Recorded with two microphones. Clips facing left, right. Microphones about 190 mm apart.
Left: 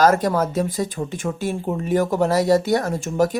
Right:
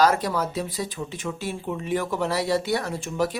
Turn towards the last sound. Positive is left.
turn(degrees=45)  # may be behind; listen again after turning